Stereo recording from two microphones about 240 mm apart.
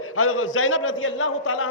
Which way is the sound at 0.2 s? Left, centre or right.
Left.